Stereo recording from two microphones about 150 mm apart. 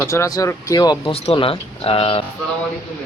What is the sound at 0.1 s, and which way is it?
Speech, 25° left (ahead or behind).